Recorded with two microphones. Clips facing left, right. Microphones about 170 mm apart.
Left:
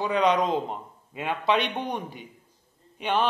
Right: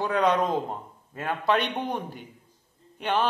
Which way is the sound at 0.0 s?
10° left (ahead or behind).